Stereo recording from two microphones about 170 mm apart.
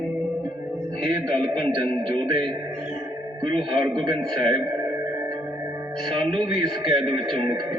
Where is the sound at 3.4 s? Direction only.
25° right (ahead or behind).